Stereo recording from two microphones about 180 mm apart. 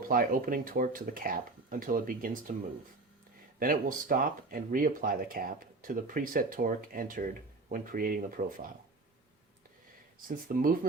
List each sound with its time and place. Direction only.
0.1 s speech: 50° right (ahead or behind)
3.6 s speech: 50° right (ahead or behind)
10.2 s speech: 50° right (ahead or behind)